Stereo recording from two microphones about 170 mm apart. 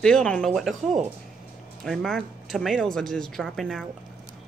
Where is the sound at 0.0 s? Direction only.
5° left (ahead or behind).